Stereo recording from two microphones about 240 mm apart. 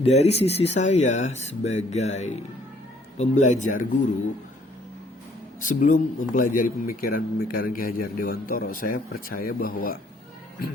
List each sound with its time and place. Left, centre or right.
0.0 s a man's voice: left
5.5 s a man's voice: left